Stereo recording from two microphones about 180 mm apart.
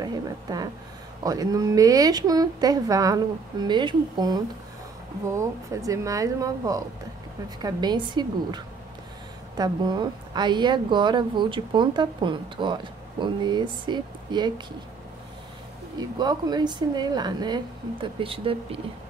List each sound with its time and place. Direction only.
0.0 s a woman's voice: 20° right (ahead or behind)
16.0 s a woman's voice: 25° right (ahead or behind)